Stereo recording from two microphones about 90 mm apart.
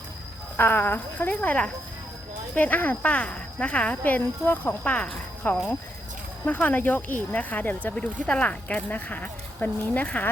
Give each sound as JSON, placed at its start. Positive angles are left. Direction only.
{"t": 0.5, "sound": "speech", "side_deg": 20}
{"t": 4.8, "sound": "speech", "side_deg": 10}